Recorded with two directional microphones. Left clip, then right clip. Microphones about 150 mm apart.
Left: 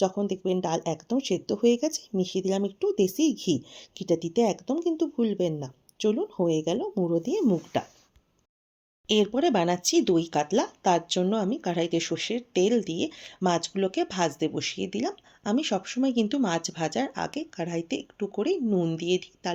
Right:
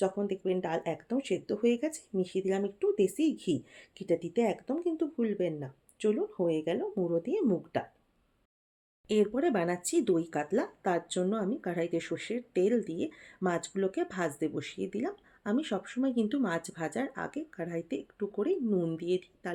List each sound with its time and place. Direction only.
0.0 s speech: 45° left (ahead or behind)
9.0 s speech: 20° left (ahead or behind)